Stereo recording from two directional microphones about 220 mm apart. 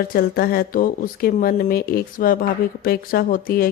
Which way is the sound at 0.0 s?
45° left (ahead or behind).